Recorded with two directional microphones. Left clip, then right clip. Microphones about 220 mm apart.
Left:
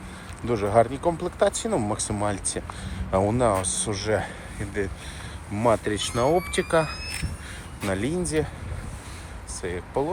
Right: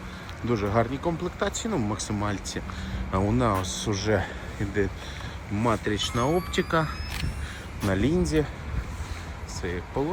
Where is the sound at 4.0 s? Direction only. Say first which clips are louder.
Left 1 dB; 15° right (ahead or behind).